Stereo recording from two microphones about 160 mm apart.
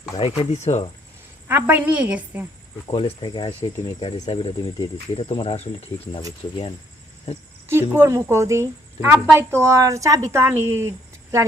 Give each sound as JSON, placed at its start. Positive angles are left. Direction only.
{"t": 0.2, "sound": "speech", "side_deg": 35}
{"t": 1.5, "sound": "a woman's voice", "side_deg": -10}
{"t": 2.8, "sound": "speech", "side_deg": 35}
{"t": 7.3, "sound": "speech", "side_deg": 40}
{"t": 7.7, "sound": "a woman's voice", "side_deg": -15}